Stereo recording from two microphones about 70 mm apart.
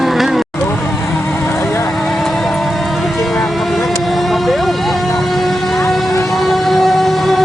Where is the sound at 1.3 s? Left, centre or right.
Left.